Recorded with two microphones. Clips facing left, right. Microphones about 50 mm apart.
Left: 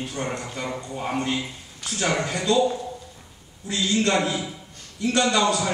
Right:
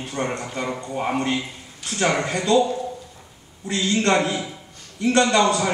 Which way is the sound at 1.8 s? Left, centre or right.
Right.